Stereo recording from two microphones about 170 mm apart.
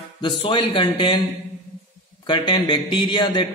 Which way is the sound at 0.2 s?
30° left (ahead or behind).